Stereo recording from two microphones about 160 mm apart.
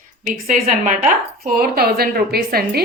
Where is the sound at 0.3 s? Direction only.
50° right (ahead or behind).